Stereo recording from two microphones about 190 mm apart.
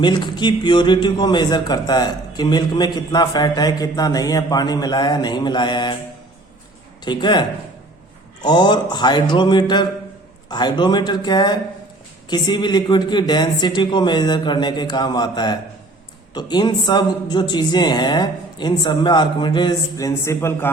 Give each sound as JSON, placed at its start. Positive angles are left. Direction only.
{"t": 0.0, "sound": "a man's voice", "side_deg": 25}
{"t": 7.0, "sound": "a man's voice", "side_deg": 25}